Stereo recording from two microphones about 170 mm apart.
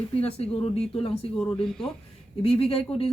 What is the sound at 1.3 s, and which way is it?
Speech, 5° left (ahead or behind).